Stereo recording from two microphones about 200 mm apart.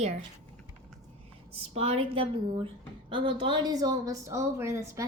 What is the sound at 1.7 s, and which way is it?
Speech, 30° right (ahead or behind).